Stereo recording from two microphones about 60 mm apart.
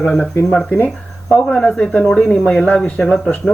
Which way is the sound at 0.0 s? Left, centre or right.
Centre.